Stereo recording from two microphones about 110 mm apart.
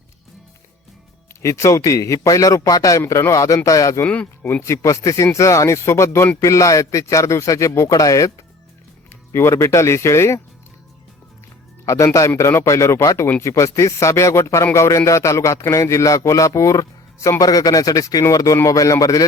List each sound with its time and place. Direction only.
1.4 s a man's voice: 25° left (ahead or behind)
4.0 s speech: 15° left (ahead or behind)
4.6 s a man's voice: 30° left (ahead or behind)
11.9 s a man's voice: 30° left (ahead or behind)